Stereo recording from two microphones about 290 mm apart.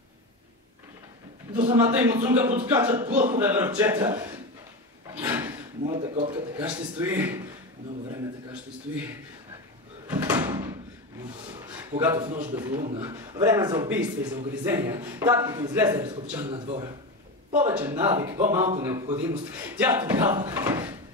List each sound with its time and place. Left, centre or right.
1.5 s a man's voice: centre
2.0 s speech: centre
5.2 s a sound: centre
5.9 s speech: right; by 7.4 s centre
10.1 s door: centre
12.0 s speech: centre
12.3 s speech: right
12.5 s speech: centre